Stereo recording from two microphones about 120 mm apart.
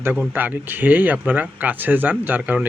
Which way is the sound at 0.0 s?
15° right (ahead or behind).